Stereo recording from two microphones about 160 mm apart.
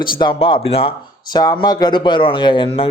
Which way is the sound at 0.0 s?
30° left (ahead or behind).